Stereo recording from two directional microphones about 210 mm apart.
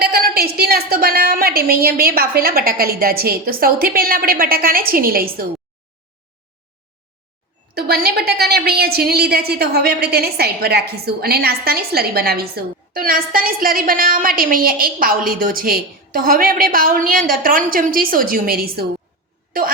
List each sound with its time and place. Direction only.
0.0 s a woman's voice: 45° right (ahead or behind)
7.7 s a woman's voice: 50° right (ahead or behind)